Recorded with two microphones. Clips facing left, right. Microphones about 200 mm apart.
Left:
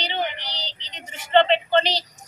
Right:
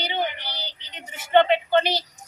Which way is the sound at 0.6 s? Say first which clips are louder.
Left 1 dB; 50° right (ahead or behind).